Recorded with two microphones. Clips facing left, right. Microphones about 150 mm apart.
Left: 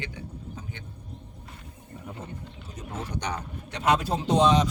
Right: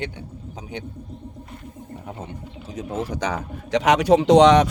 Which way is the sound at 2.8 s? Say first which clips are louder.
Right 8 dB; 90° right.